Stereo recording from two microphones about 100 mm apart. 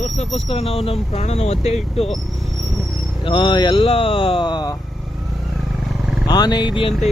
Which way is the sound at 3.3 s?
55° left (ahead or behind).